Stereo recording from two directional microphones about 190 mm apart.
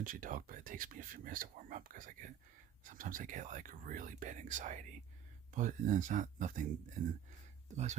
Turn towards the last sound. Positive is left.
turn(degrees=-35)  # may be behind; listen again after turning